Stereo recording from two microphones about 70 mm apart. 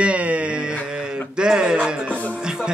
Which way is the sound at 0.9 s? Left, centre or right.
Centre.